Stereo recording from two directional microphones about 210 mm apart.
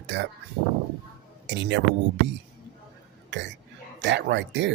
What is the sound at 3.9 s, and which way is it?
Speech, 55° right (ahead or behind).